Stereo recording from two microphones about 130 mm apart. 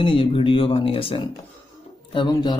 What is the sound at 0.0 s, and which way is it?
Speech, 40° left (ahead or behind).